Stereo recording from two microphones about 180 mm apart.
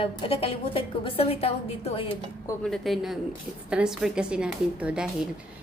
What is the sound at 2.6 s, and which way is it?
A woman's voice, centre (ahead or behind).